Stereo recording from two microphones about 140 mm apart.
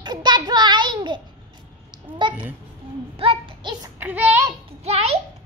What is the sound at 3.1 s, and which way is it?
Child singing, 40° right (ahead or behind).